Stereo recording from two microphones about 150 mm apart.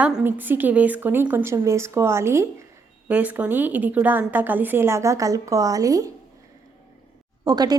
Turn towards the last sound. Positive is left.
turn(degrees=-25)  # may be behind; listen again after turning